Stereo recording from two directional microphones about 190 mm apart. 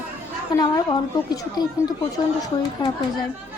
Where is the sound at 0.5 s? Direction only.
20° left (ahead or behind).